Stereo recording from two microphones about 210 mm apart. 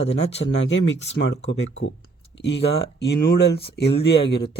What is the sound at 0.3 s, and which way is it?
Speech, 60° left (ahead or behind).